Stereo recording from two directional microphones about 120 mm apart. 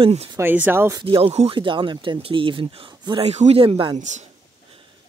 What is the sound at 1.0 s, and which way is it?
Speech, 45° right (ahead or behind).